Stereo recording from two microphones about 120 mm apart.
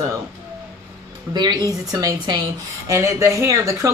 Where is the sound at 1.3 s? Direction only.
35° right (ahead or behind).